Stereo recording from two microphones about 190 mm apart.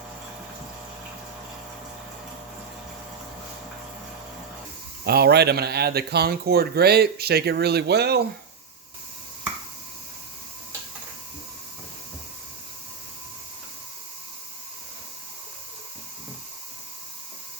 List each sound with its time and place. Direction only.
5.0 s speech: 55° right (ahead or behind)